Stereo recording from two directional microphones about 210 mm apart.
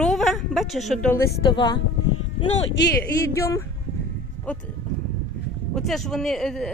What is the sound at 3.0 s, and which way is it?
Speech, 15° left (ahead or behind).